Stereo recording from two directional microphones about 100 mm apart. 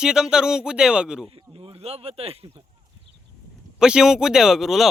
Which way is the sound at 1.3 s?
75° right (ahead or behind).